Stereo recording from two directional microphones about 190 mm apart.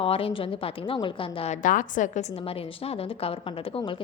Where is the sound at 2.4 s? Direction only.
30° left (ahead or behind).